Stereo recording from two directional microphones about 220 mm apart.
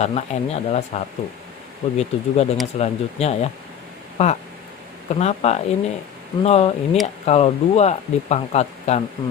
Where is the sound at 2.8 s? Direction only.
30° left (ahead or behind).